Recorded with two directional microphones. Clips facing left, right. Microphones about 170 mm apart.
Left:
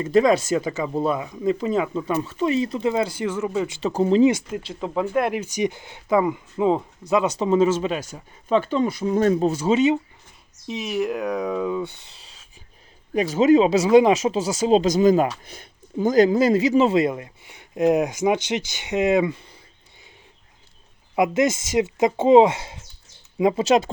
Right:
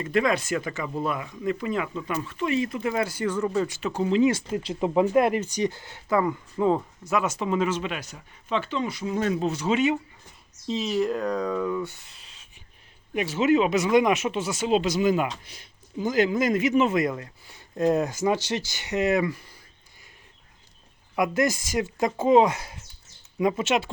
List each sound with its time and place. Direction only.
0.1 s speech: 35° left (ahead or behind)
3.2 s speech: 5° left (ahead or behind)
3.7 s speech: 30° left (ahead or behind)
4.8 s speech: 15° right (ahead or behind)
5.2 s speech: centre (ahead or behind)
5.5 s speech: 15° left (ahead or behind)
7.3 s speech: 30° left (ahead or behind)
10.7 s speech: 15° left (ahead or behind)
12.1 s a sound: 30° left (ahead or behind)
13.1 s speech: 40° left (ahead or behind)
15.4 s speech: 50° left (ahead or behind); by 19.5 s 25° left (ahead or behind)
21.2 s speech: 25° left (ahead or behind)
23.6 s speech: 35° left (ahead or behind)